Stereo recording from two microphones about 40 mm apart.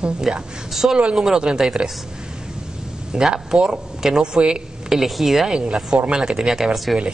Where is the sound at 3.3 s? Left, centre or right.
Right.